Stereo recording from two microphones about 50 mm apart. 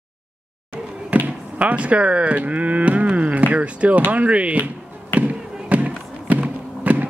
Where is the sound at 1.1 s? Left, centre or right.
Right.